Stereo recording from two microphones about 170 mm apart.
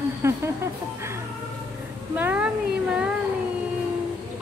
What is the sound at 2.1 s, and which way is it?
Cat, 10° right (ahead or behind).